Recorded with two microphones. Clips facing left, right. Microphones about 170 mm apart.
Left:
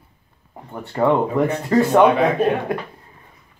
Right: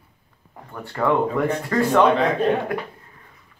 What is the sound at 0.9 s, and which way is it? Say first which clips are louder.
Speech: left 3 dB; 25° left (ahead or behind).